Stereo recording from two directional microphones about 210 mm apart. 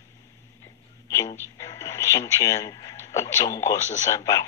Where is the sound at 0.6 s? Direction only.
15° left (ahead or behind).